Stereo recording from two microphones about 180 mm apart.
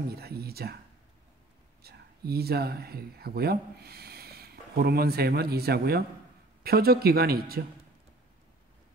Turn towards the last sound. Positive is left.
turn(degrees=-60)  # may be behind; listen again after turning